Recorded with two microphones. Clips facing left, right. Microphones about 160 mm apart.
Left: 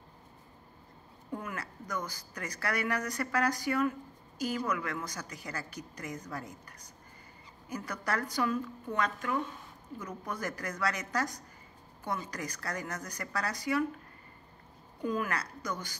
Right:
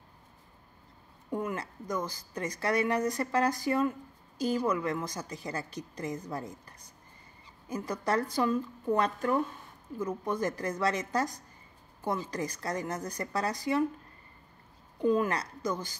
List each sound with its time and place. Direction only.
1.3 s a woman's voice: 25° right (ahead or behind)
15.0 s a woman's voice: 25° right (ahead or behind)